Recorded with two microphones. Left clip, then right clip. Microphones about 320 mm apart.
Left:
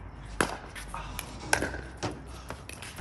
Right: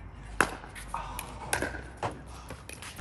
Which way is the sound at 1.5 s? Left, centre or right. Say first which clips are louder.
Left 4 dB; centre.